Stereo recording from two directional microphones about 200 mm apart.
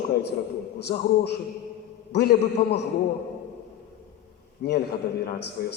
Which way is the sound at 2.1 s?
55° left (ahead or behind).